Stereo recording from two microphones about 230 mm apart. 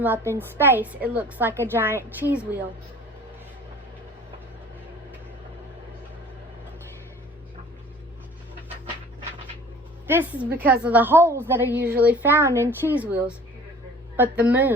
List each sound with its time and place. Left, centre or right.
0.0 s a woman's voice: centre
10.1 s a woman's voice: centre